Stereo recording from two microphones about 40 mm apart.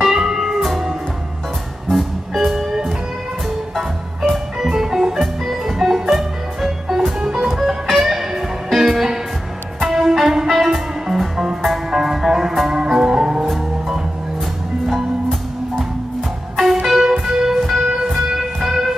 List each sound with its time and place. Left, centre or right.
0.0 s music: centre
1.9 s music: centre
3.7 s music: centre
7.2 s music: centre
7.8 s music: centre
16.8 s music: centre